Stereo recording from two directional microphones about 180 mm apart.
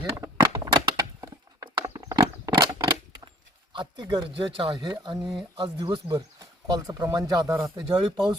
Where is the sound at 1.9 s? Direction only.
25° right (ahead or behind).